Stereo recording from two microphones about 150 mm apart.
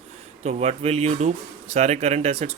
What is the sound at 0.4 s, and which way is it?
Speech, 45° right (ahead or behind).